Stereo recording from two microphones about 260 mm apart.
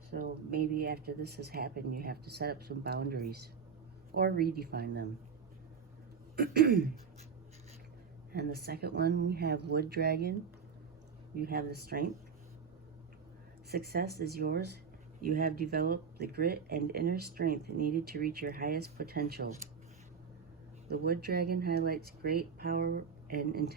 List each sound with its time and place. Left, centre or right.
0.1 s speech: right
6.3 s speech: right
8.3 s speech: right
11.3 s speech: right
13.7 s speech: right
20.9 s speech: right